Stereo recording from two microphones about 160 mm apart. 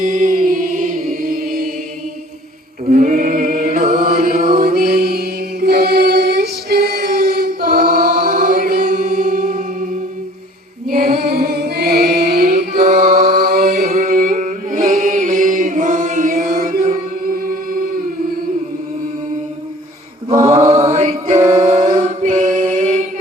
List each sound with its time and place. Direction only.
0.0 s music: 50° right (ahead or behind); by 1.7 s 65° right (ahead or behind)
2.8 s chant: 45° right (ahead or behind); by 3.8 s 65° right (ahead or behind)
3.8 s chant: 45° right (ahead or behind)
4.6 s music: 65° right (ahead or behind); by 6.8 s 85° right
7.3 s chant: 65° right (ahead or behind)
10.8 s chant: 60° right (ahead or behind); by 12.0 s 80° right
12.4 s music: 70° right (ahead or behind)
13.2 s singing: 70° right (ahead or behind)
13.7 s music: 45° right (ahead or behind)
14.0 s chant: 60° right (ahead or behind)
20.3 s chant: 20° right (ahead or behind)
20.9 s choir: 50° right (ahead or behind)
21.6 s singing: 50° right (ahead or behind)
22.0 s choir: 50° right (ahead or behind)